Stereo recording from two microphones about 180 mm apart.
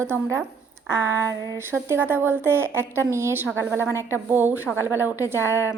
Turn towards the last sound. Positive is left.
turn(degrees=15)  # may be behind; listen again after turning